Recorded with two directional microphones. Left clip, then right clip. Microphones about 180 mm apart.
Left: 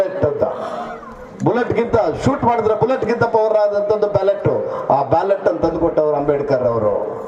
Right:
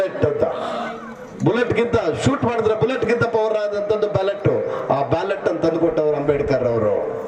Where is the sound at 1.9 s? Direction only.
55° left (ahead or behind).